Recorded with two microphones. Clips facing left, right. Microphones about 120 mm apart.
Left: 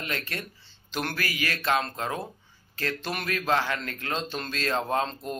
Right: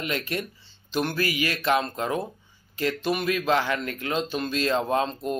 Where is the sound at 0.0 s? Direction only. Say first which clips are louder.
Right 5 dB; 20° right (ahead or behind).